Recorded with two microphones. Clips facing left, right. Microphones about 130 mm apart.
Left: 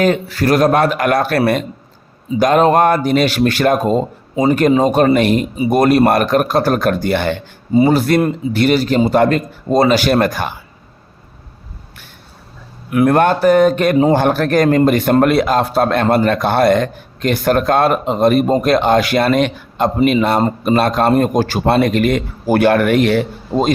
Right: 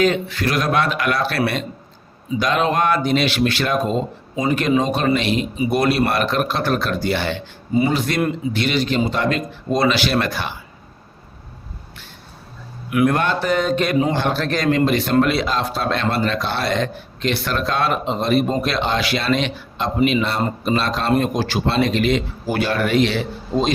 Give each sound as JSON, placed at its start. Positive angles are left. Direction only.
{"t": 0.0, "sound": "speech", "side_deg": 45}
{"t": 7.7, "sound": "speech", "side_deg": 35}
{"t": 12.9, "sound": "speech", "side_deg": 40}